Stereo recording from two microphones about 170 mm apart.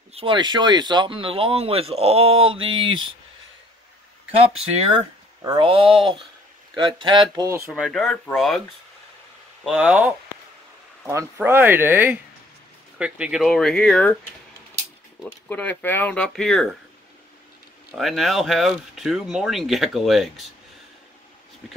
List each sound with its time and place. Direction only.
0.1 s speech: 30° right (ahead or behind)
4.9 s speech: 25° right (ahead or behind)
7.7 s speech: centre (ahead or behind)
9.7 s speech: 5° right (ahead or behind)
15.4 s speech: 10° left (ahead or behind)
17.9 s speech: centre (ahead or behind)